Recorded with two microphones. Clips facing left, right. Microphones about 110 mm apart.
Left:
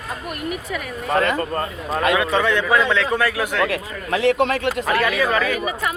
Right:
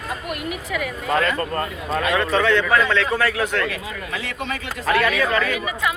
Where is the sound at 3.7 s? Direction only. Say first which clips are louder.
Left 5 dB; 75° left (ahead or behind).